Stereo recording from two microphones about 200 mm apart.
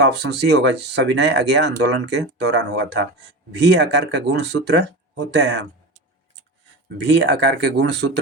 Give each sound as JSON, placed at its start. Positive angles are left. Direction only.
{"t": 0.0, "sound": "speech", "side_deg": -60}
{"t": 7.1, "sound": "speech", "side_deg": -60}